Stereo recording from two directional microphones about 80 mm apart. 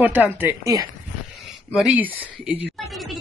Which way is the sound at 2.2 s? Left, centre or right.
Centre.